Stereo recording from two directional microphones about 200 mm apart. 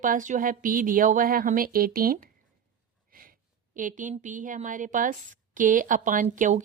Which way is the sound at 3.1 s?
45° right (ahead or behind).